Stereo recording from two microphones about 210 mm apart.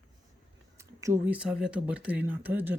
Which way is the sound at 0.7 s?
15° right (ahead or behind).